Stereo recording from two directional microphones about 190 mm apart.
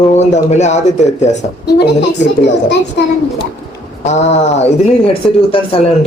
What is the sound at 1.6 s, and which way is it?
A child's voice, 65° left (ahead or behind).